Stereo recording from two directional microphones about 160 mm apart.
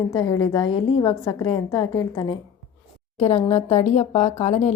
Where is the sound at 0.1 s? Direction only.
30° left (ahead or behind).